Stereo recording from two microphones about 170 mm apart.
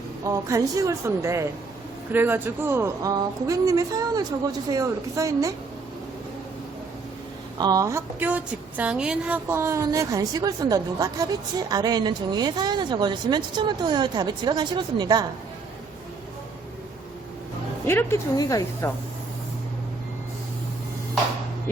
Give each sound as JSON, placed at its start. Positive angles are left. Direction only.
{"t": 0.3, "sound": "a woman's voice", "side_deg": -20}
{"t": 7.6, "sound": "a woman's voice", "side_deg": -20}
{"t": 17.8, "sound": "speech", "side_deg": 15}